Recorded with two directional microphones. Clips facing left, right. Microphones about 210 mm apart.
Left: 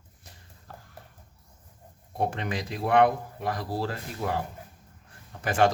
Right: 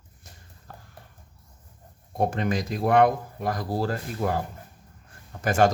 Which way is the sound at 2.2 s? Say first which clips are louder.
Right 4 dB; 45° right (ahead or behind).